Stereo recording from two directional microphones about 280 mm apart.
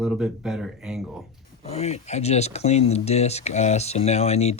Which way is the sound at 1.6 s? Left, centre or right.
Left.